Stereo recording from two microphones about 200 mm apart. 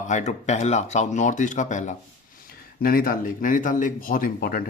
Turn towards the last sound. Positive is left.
turn(degrees=45)  # may be behind; listen again after turning